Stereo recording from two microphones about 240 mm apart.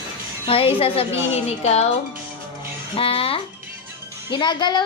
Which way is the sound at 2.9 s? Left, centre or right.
Left.